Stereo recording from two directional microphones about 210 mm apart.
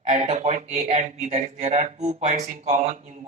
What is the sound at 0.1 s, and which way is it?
Speech, 35° right (ahead or behind).